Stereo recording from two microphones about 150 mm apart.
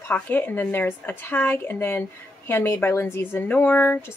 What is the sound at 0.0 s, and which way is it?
Speech, 10° left (ahead or behind).